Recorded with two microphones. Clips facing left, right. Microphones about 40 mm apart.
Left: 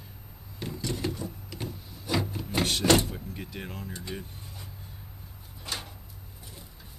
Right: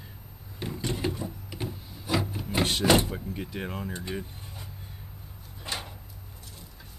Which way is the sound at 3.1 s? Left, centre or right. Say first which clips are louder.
Right 4 dB; centre.